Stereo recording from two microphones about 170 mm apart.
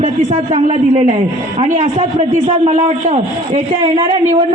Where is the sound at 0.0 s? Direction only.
40° right (ahead or behind).